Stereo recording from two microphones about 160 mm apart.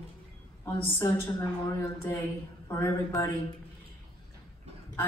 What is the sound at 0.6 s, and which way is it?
A woman's voice, 15° left (ahead or behind).